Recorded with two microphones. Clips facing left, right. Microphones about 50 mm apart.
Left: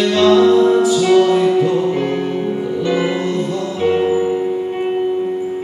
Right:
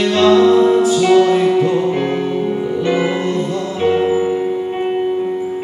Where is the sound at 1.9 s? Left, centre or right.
Right.